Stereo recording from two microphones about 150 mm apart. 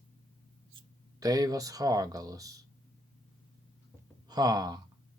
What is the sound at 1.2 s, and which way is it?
Speech, 25° right (ahead or behind).